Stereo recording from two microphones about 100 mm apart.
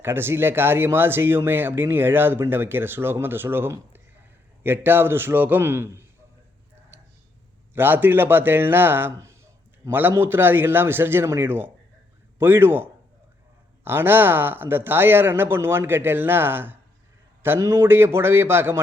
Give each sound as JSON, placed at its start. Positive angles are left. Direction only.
{"t": 0.0, "sound": "speech", "side_deg": -20}
{"t": 7.7, "sound": "a man's voice", "side_deg": -20}
{"t": 13.8, "sound": "speech", "side_deg": -20}